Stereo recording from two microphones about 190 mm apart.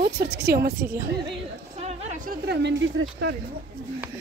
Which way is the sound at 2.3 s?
60° right (ahead or behind).